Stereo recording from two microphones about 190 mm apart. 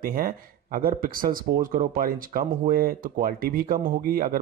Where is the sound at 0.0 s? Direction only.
50° right (ahead or behind).